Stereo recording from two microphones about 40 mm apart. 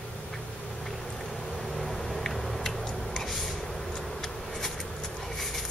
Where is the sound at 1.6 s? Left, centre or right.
Centre.